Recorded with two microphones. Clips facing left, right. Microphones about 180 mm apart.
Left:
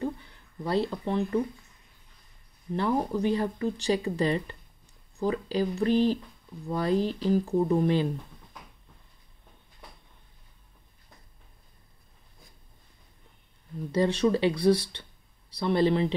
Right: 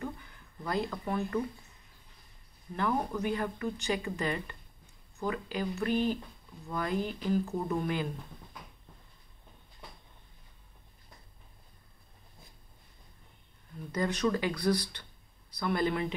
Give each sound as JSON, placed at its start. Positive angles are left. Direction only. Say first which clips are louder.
{"t": 0.0, "sound": "a sound", "louder": "left 7 dB", "side_deg": 30}
{"t": 2.7, "sound": "speech", "louder": "left 5 dB", "side_deg": 30}
{"t": 13.9, "sound": "speech", "louder": "left 6 dB", "side_deg": 30}